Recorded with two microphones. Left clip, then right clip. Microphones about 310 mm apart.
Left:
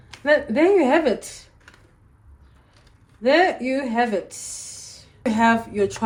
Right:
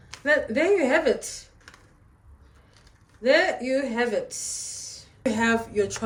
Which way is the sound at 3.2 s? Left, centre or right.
Centre.